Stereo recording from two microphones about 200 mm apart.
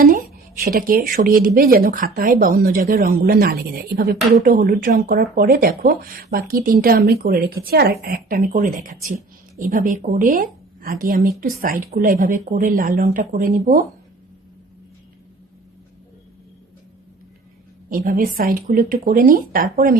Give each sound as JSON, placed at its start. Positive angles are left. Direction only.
{"t": 0.6, "sound": "speech", "side_deg": -45}
{"t": 17.8, "sound": "speech", "side_deg": -45}